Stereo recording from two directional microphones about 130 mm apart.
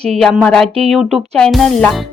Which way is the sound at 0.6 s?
50° right (ahead or behind).